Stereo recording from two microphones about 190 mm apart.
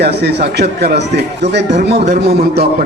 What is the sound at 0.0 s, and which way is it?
A man's voice, 60° right (ahead or behind).